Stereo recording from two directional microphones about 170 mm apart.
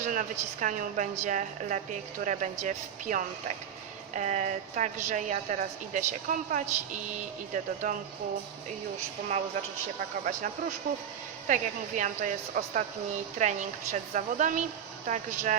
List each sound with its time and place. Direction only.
0.0 s a woman's voice: 50° right (ahead or behind)
10.2 s a woman's voice: 45° right (ahead or behind)